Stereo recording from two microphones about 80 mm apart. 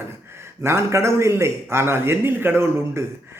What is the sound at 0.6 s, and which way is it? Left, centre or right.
Speech, right.